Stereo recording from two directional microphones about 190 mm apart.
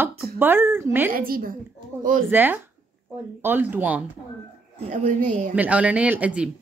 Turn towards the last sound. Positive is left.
turn(degrees=-5)  # may be behind; listen again after turning